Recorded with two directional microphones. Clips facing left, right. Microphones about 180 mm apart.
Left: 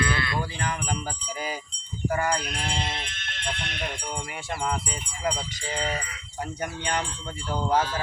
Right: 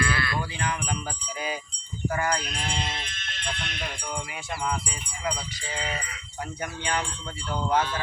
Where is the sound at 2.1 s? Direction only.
30° left (ahead or behind).